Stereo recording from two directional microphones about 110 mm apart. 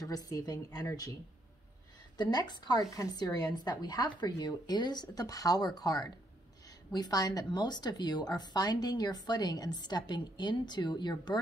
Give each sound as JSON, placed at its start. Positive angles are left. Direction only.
{"t": 0.0, "sound": "speech", "side_deg": 30}
{"t": 2.1, "sound": "speech", "side_deg": 40}